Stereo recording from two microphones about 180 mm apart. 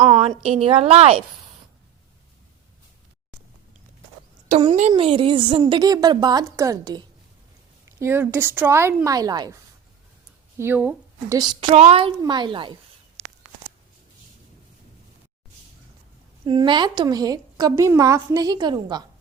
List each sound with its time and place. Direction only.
0.2 s a woman's voice: 35° right (ahead or behind)
4.8 s a woman's voice: 35° right (ahead or behind)
10.6 s speech: 10° right (ahead or behind)
11.7 s a woman's voice: 35° right (ahead or behind)
16.4 s a woman's voice: 25° right (ahead or behind)